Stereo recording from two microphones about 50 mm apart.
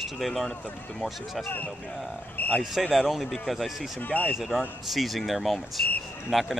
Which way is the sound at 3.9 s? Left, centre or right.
Left.